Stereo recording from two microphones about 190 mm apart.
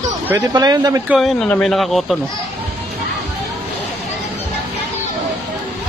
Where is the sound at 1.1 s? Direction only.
Centre (ahead or behind).